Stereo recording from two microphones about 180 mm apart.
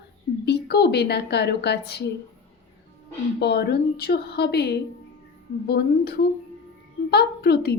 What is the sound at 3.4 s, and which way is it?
A woman's voice, 65° left (ahead or behind).